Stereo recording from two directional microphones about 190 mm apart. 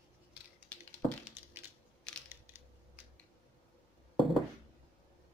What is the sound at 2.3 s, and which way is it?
Crushing, 10° right (ahead or behind).